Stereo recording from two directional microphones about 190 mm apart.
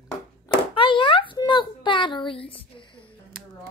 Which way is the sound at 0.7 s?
25° left (ahead or behind).